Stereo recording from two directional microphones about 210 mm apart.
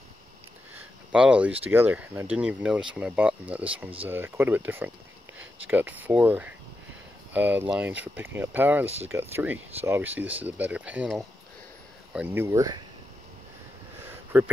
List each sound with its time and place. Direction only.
1.1 s speech: 5° right (ahead or behind)
8.8 s speech: 30° right (ahead or behind)
9.1 s speech: 10° right (ahead or behind)
14.3 s speech: 10° right (ahead or behind)